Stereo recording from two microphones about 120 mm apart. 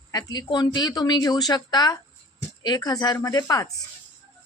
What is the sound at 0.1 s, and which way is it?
A woman's voice, 35° left (ahead or behind).